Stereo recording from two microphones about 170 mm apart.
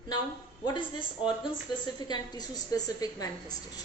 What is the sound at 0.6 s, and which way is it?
A woman's voice, 30° left (ahead or behind).